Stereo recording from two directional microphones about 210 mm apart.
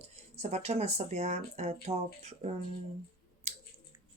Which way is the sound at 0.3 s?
30° right (ahead or behind).